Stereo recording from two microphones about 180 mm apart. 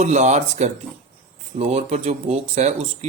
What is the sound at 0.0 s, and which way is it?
A man's voice, 40° right (ahead or behind).